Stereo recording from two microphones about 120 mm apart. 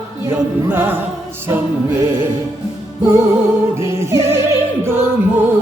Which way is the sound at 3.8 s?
20° right (ahead or behind).